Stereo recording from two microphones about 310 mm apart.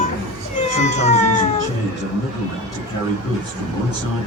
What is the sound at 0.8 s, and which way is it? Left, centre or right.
Cat, left.